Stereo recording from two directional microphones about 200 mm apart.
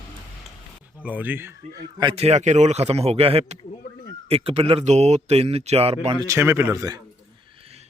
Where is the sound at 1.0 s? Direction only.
10° right (ahead or behind); by 6.1 s 30° right (ahead or behind).